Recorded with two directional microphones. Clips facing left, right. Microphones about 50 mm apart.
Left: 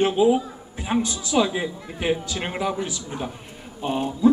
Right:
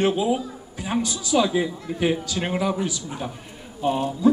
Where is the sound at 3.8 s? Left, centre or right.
Centre.